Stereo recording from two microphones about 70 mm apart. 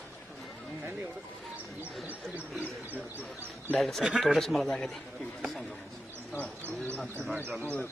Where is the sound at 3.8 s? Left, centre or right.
Centre.